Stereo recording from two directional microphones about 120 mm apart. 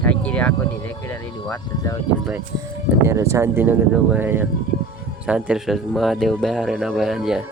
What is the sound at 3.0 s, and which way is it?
Speech, 25° right (ahead or behind).